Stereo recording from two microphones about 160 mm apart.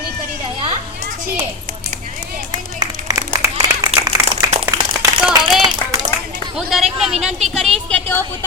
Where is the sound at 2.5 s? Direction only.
25° right (ahead or behind).